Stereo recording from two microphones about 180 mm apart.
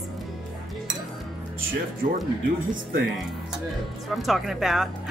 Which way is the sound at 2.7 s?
55° right (ahead or behind).